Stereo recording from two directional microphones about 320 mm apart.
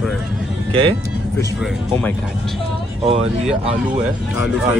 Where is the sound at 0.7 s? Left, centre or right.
Centre.